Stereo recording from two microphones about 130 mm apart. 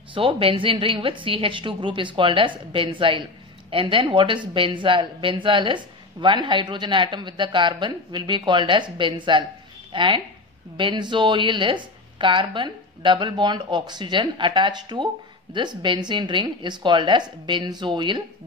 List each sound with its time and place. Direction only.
0.1 s a woman's voice: 45° right (ahead or behind)